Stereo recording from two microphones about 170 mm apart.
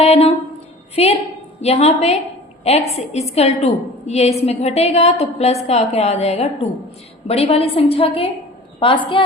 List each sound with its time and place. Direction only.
0.0 s a woman's voice: 35° left (ahead or behind)